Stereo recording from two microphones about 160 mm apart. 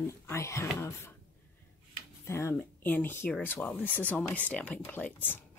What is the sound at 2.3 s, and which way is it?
Speech, 15° left (ahead or behind).